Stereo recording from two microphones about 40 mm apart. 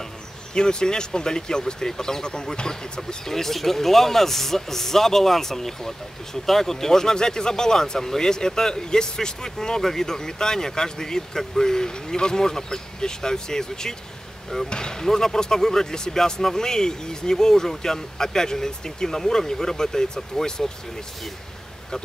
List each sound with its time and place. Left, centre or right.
0.6 s speech: centre